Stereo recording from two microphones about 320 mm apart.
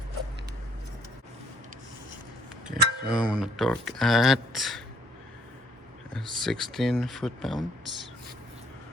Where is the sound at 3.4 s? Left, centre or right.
Centre.